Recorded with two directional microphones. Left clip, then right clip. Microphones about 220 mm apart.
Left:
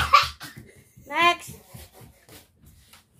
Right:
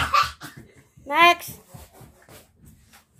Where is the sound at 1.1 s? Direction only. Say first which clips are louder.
Right 5 dB; 25° right (ahead or behind).